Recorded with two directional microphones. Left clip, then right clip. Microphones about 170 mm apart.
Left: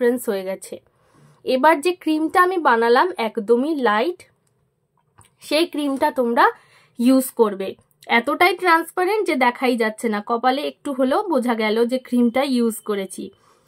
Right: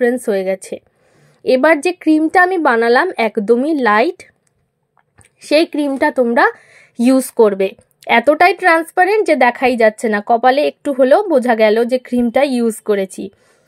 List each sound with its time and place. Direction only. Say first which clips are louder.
0.0 s speech: right 5 dB; 20° right (ahead or behind); by 4.3 s 35° right (ahead or behind)
5.4 s speech: right 7 dB; 25° right (ahead or behind)